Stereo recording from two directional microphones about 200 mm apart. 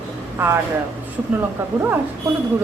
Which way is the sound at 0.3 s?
15° right (ahead or behind).